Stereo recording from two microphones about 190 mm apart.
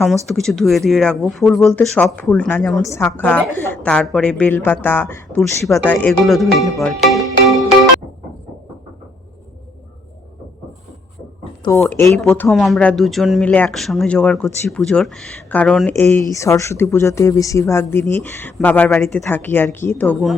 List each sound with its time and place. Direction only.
0.0 s speech: centre (ahead or behind)
2.8 s speech: 15° left (ahead or behind)
5.4 s speech: centre (ahead or behind)
11.6 s speech: 10° left (ahead or behind)